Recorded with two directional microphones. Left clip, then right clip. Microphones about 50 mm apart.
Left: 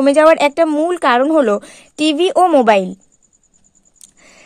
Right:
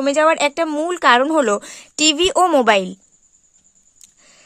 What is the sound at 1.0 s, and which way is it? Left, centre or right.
A woman's voice, centre.